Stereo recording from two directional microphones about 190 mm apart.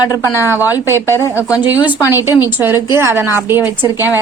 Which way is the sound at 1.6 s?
10° right (ahead or behind).